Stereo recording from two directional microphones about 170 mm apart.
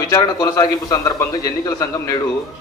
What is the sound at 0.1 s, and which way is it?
A man's voice, 20° left (ahead or behind).